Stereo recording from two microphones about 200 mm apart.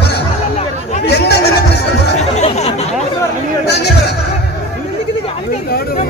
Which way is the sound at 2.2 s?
35° left (ahead or behind).